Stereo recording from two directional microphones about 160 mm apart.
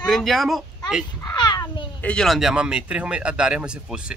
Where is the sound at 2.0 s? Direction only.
5° left (ahead or behind).